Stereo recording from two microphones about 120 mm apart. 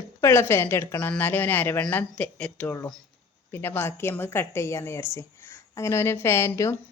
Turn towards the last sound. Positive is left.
turn(degrees=25)  # may be behind; listen again after turning